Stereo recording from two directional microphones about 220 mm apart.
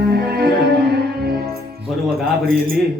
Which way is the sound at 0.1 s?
45° right (ahead or behind).